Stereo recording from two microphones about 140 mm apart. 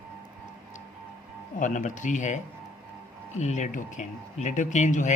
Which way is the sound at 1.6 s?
65° left (ahead or behind).